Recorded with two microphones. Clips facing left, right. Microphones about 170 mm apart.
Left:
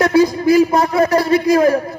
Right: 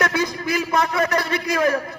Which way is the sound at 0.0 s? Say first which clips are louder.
Left 10 dB; 30° left (ahead or behind).